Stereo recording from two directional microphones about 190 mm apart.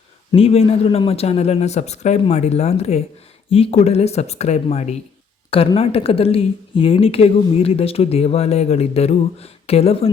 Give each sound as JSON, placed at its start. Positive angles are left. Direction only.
{"t": 0.3, "sound": "a woman's voice", "side_deg": 30}